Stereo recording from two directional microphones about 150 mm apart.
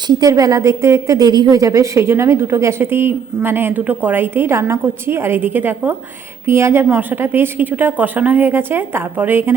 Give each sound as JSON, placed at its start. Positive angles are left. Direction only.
{"t": 0.1, "sound": "a woman's voice", "side_deg": -25}